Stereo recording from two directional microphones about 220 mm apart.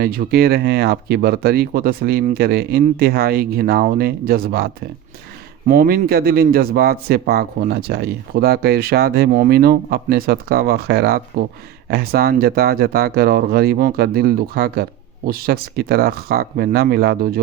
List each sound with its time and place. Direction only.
0.0 s speech: 45° right (ahead or behind)